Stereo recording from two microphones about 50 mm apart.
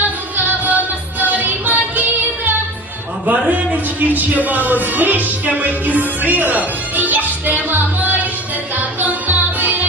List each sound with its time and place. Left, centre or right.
0.0 s music: right
3.2 s speech: right
8.7 s music: right